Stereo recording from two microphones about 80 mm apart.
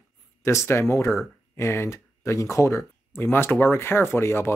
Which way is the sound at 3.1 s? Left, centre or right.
Left.